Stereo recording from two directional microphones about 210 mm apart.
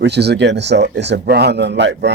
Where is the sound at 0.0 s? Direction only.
50° right (ahead or behind).